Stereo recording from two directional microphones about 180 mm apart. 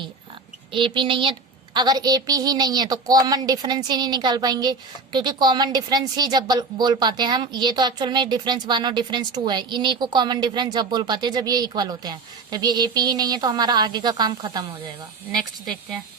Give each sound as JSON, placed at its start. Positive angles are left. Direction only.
{"t": 0.7, "sound": "a woman's voice", "side_deg": -25}
{"t": 15.3, "sound": "speech", "side_deg": 0}